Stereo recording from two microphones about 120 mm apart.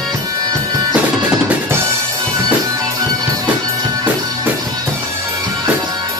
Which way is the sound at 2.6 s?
30° right (ahead or behind).